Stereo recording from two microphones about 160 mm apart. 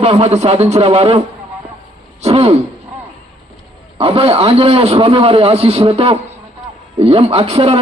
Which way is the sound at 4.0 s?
35° right (ahead or behind).